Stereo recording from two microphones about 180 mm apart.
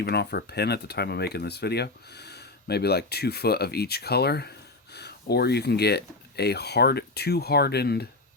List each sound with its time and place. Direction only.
0.0 s speech: 65° left (ahead or behind)